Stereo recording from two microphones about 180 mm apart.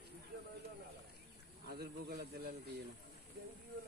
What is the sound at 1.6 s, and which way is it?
Speech, 60° right (ahead or behind).